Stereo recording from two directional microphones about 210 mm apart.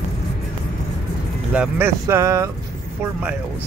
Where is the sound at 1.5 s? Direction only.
10° right (ahead or behind).